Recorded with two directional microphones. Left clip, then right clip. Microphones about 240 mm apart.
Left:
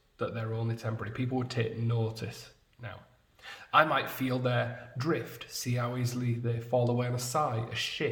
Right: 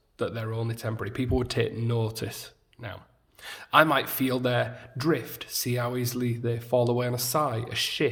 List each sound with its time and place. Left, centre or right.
0.2 s a man's voice: right